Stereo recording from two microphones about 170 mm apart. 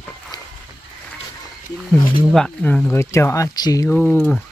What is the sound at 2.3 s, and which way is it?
Speech, 5° left (ahead or behind).